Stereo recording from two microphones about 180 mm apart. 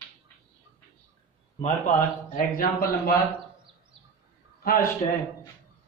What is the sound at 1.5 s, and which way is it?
A man's voice, 45° left (ahead or behind).